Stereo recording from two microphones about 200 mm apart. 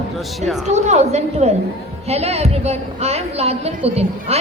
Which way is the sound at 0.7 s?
35° right (ahead or behind).